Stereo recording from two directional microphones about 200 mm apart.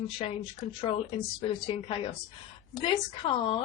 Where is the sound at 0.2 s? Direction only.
30° left (ahead or behind).